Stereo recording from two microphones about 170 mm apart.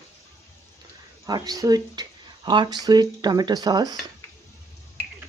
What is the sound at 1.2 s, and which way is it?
Speech, 20° right (ahead or behind).